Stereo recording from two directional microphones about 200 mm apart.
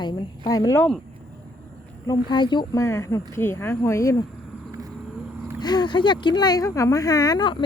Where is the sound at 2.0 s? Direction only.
20° left (ahead or behind).